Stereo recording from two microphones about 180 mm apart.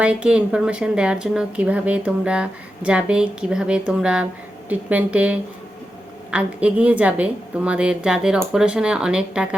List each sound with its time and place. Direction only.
0.0 s a woman's voice: 5° right (ahead or behind)